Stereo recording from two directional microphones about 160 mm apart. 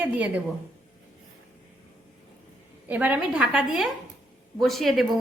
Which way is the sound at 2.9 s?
10° right (ahead or behind).